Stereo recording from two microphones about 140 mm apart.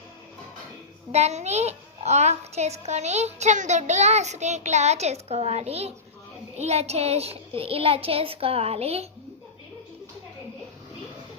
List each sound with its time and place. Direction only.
1.1 s a child's voice: 50° right (ahead or behind)